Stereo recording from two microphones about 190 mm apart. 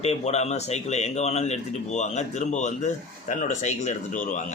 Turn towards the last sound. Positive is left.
turn(degrees=40)  # may be behind; listen again after turning